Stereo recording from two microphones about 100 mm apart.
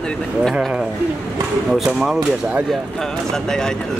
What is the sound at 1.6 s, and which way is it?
Speech, 5° right (ahead or behind).